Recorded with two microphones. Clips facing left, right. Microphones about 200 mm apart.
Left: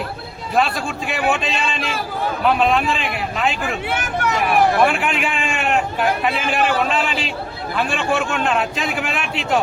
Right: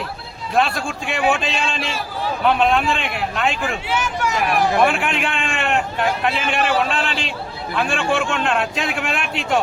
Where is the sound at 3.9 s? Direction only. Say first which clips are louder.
Even; 55° left (ahead or behind).